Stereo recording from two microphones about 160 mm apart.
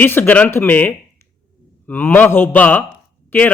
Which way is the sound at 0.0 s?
10° left (ahead or behind).